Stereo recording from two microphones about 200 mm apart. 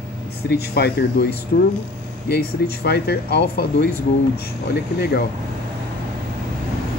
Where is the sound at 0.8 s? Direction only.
55° left (ahead or behind).